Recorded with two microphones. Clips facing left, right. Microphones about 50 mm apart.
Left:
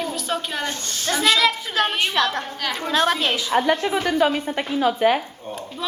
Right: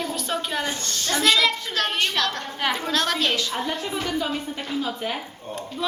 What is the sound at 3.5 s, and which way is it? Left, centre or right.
A woman's voice, left.